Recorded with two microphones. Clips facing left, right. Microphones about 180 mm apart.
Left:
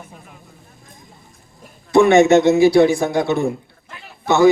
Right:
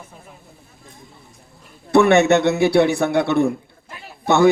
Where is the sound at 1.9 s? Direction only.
60° right (ahead or behind).